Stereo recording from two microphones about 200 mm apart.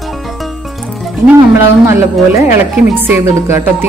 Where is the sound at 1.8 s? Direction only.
15° right (ahead or behind).